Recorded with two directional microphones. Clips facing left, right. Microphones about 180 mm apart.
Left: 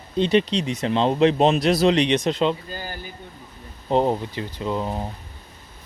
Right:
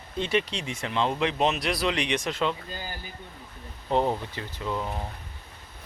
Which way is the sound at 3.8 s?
20° left (ahead or behind).